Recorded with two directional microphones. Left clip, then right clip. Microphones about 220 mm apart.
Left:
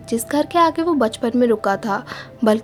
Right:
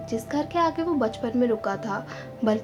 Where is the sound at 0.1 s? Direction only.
45° left (ahead or behind).